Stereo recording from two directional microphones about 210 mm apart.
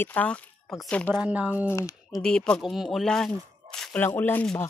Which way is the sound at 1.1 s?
5° right (ahead or behind).